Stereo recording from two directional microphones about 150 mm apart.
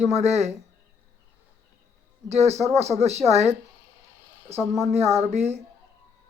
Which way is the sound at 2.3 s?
45° right (ahead or behind).